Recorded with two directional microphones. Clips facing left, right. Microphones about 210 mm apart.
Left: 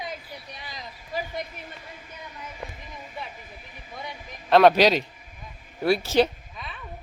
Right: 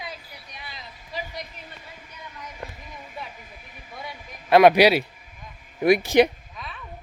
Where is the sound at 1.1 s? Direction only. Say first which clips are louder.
Left 3 dB; 50° left (ahead or behind).